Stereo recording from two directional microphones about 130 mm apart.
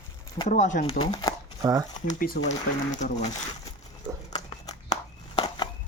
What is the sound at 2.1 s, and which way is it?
Speech, 70° left (ahead or behind).